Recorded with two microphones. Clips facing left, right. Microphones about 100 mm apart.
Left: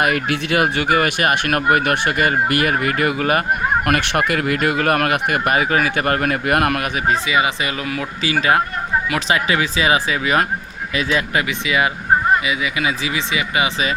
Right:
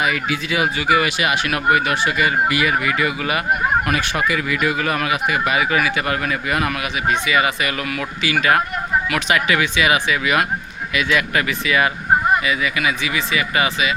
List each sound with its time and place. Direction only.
0.0 s speech: 60° left (ahead or behind)
3.8 s speech: 60° left (ahead or behind)
7.3 s speech: 20° left (ahead or behind)